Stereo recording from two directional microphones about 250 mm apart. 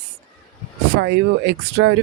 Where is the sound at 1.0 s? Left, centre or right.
Right.